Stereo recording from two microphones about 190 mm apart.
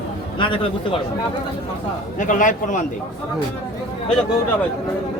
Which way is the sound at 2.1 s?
40° left (ahead or behind).